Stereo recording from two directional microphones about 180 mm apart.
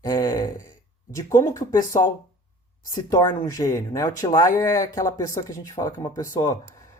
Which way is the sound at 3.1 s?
20° left (ahead or behind).